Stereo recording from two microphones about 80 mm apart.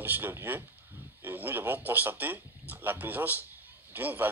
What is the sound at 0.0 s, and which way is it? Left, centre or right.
A man's voice, right.